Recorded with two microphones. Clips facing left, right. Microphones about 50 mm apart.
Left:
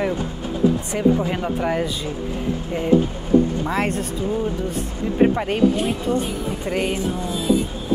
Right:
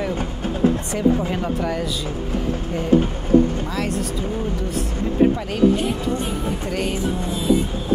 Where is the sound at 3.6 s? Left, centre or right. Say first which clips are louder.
Left 3 dB; left.